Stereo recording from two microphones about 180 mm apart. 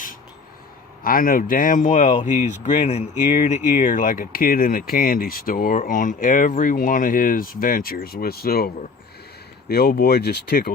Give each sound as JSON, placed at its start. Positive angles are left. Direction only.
{"t": 1.0, "sound": "speech", "side_deg": 50}